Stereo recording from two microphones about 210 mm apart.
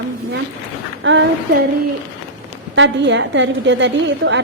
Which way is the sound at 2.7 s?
60° right (ahead or behind).